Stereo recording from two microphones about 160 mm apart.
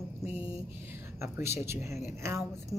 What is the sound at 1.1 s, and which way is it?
Speech, 15° right (ahead or behind).